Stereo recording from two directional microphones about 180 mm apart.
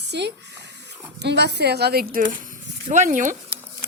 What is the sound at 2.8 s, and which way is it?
Speech, 45° right (ahead or behind).